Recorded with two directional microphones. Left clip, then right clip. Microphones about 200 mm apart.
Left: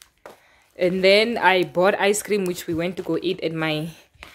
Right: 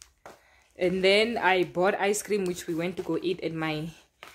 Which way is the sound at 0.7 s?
20° left (ahead or behind).